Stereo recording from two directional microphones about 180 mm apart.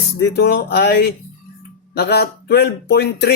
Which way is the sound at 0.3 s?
65° left (ahead or behind).